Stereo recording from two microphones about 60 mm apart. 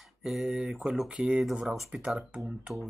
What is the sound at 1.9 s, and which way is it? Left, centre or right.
Speech, centre.